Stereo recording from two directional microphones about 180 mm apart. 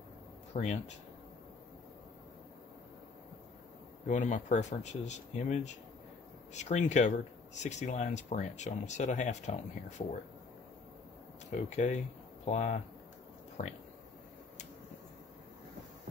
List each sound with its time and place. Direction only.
0.5 s speech: 40° left (ahead or behind)
4.1 s speech: 45° left (ahead or behind)
11.5 s speech: 40° left (ahead or behind)